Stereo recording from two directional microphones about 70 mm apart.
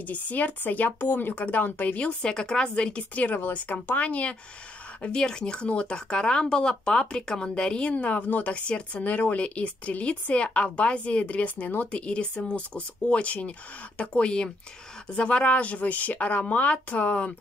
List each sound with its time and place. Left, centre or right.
0.0 s speech: left